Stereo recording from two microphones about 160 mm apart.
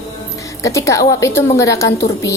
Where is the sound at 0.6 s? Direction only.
20° left (ahead or behind).